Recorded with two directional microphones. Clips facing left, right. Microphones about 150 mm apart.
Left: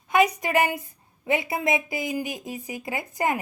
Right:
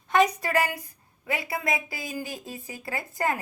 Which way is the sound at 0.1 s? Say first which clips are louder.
Left 1 dB; 10° left (ahead or behind).